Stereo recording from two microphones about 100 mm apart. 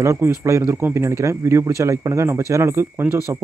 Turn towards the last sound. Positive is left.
turn(degrees=-20)  # may be behind; listen again after turning